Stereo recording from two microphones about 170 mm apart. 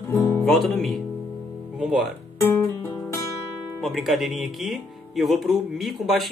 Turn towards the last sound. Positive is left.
turn(degrees=0)  # may be behind; listen again after turning